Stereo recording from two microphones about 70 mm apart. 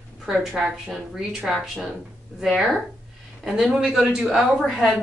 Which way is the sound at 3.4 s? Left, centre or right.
Centre.